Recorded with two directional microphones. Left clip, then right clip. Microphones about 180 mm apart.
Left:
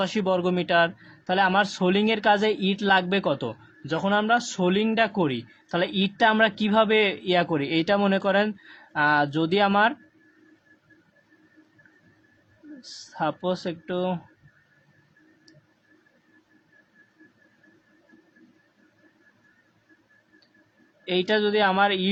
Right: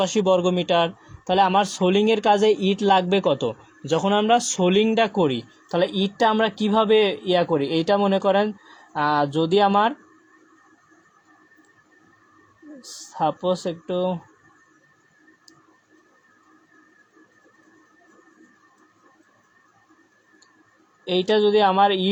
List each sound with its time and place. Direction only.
0.0 s a man's voice: 15° right (ahead or behind)
12.8 s a man's voice: 15° right (ahead or behind)
21.0 s a man's voice: 15° right (ahead or behind)